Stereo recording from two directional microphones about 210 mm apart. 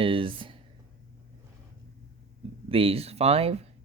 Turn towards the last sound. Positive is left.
turn(degrees=-30)  # may be behind; listen again after turning